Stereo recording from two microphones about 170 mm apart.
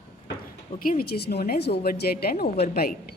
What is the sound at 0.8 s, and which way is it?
Speech, 60° left (ahead or behind).